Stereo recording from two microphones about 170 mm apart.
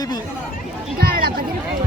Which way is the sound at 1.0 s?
60° right (ahead or behind).